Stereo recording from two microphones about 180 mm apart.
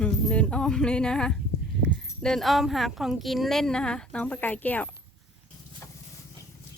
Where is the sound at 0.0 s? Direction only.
5° left (ahead or behind).